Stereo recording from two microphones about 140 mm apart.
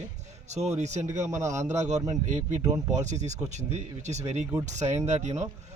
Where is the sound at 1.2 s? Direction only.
20° right (ahead or behind).